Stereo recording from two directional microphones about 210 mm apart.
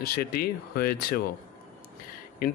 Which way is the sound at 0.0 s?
45° left (ahead or behind).